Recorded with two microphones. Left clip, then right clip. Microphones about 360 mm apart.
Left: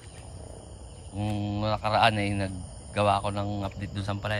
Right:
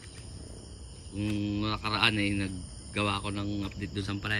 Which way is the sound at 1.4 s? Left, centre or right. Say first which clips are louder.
Left 6 dB; centre.